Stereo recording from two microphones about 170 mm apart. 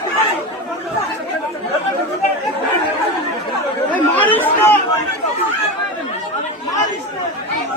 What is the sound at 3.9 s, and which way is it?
Chatter, 10° left (ahead or behind).